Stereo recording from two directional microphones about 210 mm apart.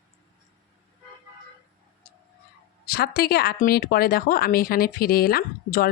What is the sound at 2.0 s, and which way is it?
Tick-tock, 40° left (ahead or behind).